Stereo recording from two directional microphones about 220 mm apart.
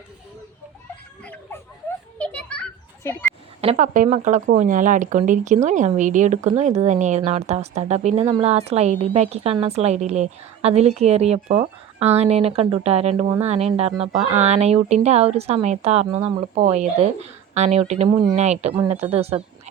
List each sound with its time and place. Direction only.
1.2 s a sound: 5° left (ahead or behind)
2.1 s children playing: 5° left (ahead or behind)
3.6 s a woman's voice: 30° right (ahead or behind)